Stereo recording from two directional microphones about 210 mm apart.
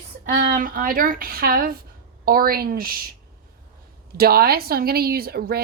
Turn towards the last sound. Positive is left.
turn(degrees=-45)  # may be behind; listen again after turning